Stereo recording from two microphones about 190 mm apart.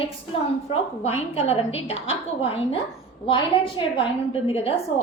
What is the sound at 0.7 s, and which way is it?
A woman's voice, 30° left (ahead or behind).